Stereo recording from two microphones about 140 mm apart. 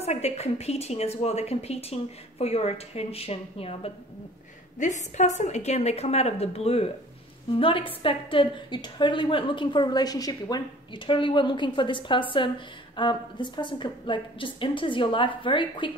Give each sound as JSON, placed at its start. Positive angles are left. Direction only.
{"t": 0.0, "sound": "a woman's voice", "side_deg": 50}
{"t": 4.7, "sound": "a woman's voice", "side_deg": 60}